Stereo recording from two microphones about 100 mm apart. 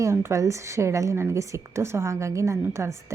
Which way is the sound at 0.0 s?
30° right (ahead or behind).